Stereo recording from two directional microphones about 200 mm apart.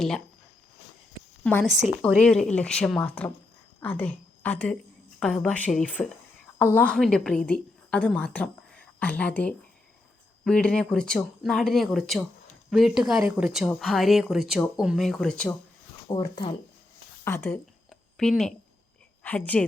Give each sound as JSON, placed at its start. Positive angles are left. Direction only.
{"t": 1.5, "sound": "a woman's voice", "side_deg": 10}
{"t": 16.0, "sound": "speech", "side_deg": 20}
{"t": 17.2, "sound": "a sound", "side_deg": 10}
{"t": 19.2, "sound": "speech", "side_deg": 10}